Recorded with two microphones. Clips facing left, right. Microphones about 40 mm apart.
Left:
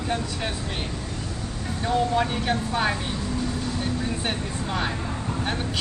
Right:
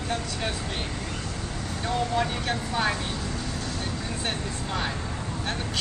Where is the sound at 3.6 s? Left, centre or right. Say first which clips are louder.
Left 4 dB; centre.